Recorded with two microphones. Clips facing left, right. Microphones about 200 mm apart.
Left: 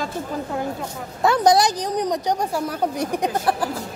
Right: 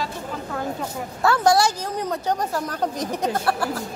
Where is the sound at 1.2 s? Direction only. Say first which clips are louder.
Left 2 dB; 20° left (ahead or behind).